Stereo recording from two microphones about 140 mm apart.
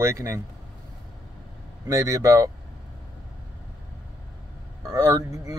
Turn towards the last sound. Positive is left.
turn(degrees=-25)  # may be behind; listen again after turning